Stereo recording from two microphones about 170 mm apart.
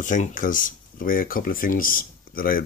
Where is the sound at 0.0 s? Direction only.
50° left (ahead or behind).